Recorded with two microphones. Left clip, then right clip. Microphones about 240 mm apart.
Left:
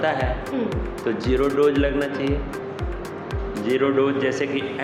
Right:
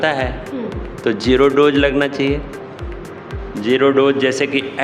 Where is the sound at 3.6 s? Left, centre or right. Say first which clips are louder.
Right 7 dB; right.